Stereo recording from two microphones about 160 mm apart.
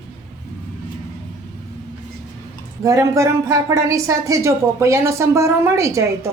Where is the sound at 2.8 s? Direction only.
20° right (ahead or behind).